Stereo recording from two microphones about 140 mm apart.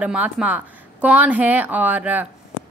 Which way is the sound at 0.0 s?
10° right (ahead or behind).